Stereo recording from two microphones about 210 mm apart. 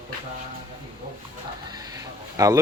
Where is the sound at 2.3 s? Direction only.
15° right (ahead or behind).